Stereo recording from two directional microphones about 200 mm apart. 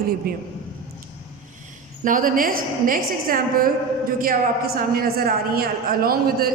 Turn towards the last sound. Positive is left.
turn(degrees=-50)  # may be behind; listen again after turning